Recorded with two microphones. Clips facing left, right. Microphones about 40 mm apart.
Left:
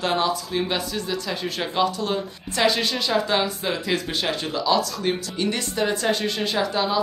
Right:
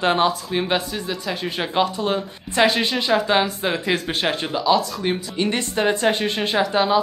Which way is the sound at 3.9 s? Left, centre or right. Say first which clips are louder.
Right 2 dB; centre.